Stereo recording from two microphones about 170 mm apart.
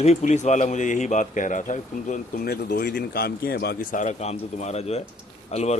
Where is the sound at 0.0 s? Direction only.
40° left (ahead or behind).